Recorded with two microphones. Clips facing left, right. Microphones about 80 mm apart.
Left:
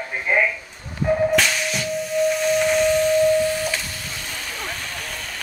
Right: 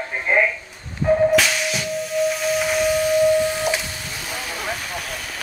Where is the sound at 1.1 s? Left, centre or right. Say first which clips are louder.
Right 3 dB; centre.